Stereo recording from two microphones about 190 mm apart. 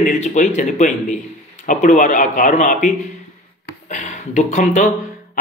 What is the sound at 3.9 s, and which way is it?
Speech, 40° left (ahead or behind).